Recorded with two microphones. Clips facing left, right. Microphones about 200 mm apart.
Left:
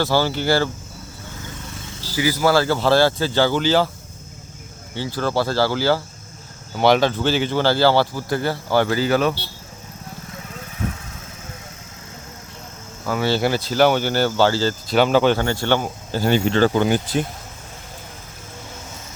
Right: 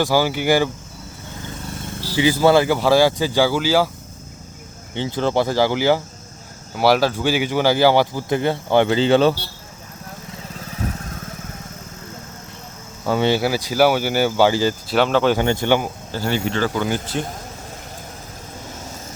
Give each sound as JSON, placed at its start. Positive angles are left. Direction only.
{"t": 0.0, "sound": "speech", "side_deg": -10}
{"t": 1.9, "sound": "vehicle", "side_deg": -60}
{"t": 2.1, "sound": "speech", "side_deg": -25}
{"t": 4.9, "sound": "speech", "side_deg": -20}
{"t": 6.7, "sound": "speech", "side_deg": -5}
{"t": 13.1, "sound": "speech", "side_deg": -25}
{"t": 13.4, "sound": "speech", "side_deg": -10}
{"t": 14.9, "sound": "speech", "side_deg": 0}
{"t": 15.4, "sound": "speech", "side_deg": -15}
{"t": 16.1, "sound": "speech", "side_deg": 15}
{"t": 16.5, "sound": "speech", "side_deg": 30}